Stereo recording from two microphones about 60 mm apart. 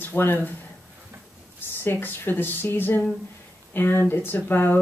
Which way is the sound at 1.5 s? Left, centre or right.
Left.